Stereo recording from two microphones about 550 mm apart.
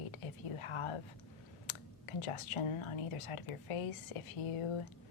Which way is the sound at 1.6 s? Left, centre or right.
Left.